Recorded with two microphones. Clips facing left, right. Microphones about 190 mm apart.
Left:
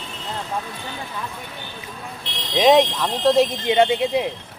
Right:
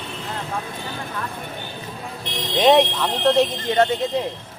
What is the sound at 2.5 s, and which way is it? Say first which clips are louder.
Speech: left 1 dB; centre (ahead or behind).